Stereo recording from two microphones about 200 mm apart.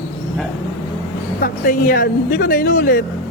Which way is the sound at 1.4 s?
45° left (ahead or behind).